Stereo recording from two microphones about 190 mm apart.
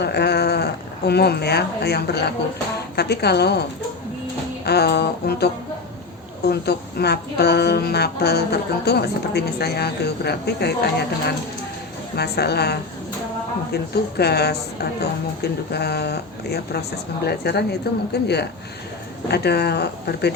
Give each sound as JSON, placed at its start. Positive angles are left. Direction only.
{"t": 0.0, "sound": "speech", "side_deg": 60}
{"t": 6.5, "sound": "speech", "side_deg": 60}
{"t": 12.1, "sound": "speech", "side_deg": 60}